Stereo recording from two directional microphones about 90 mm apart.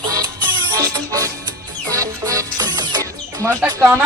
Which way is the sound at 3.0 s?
40° right (ahead or behind).